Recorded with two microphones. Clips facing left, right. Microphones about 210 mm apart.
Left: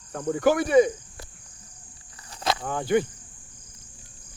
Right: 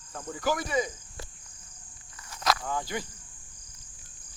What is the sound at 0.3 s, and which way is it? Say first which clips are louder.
Speech: left 10 dB; 60° left (ahead or behind).